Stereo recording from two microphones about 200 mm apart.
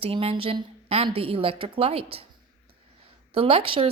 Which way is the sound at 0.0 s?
30° right (ahead or behind).